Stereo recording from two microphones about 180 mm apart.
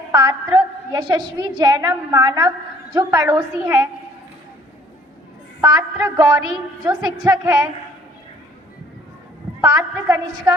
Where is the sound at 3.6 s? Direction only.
10° right (ahead or behind).